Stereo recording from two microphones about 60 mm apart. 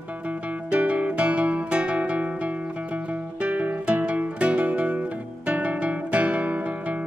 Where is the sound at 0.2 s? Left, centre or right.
Right.